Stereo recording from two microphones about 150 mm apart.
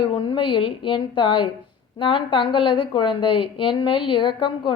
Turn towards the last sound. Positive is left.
turn(degrees=35)  # may be behind; listen again after turning